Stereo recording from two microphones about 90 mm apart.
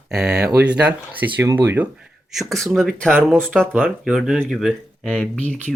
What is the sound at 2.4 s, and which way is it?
Speech, centre (ahead or behind).